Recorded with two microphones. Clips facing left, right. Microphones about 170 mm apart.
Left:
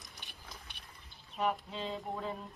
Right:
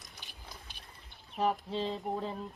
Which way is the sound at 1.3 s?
35° right (ahead or behind).